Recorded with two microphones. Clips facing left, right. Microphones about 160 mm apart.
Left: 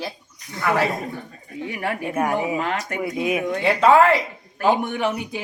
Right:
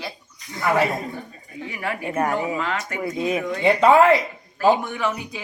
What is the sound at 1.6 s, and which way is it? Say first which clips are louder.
Speech: left 2 dB; 55° left (ahead or behind).